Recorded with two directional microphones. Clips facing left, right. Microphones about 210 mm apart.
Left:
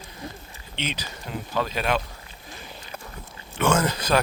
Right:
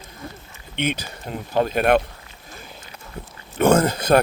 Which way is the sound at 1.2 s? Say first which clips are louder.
Right 6 dB; 45° right (ahead or behind).